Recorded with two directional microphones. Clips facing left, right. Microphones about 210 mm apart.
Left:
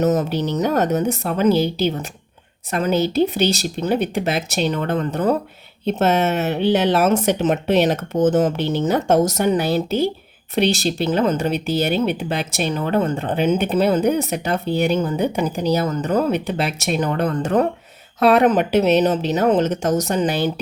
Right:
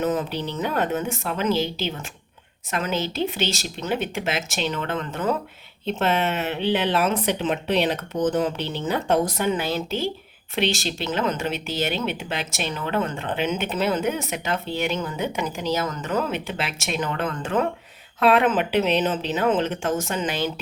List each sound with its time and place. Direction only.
0.0 s speech: 40° left (ahead or behind)